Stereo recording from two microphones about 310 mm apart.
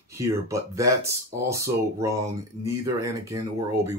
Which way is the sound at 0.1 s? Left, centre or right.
Centre.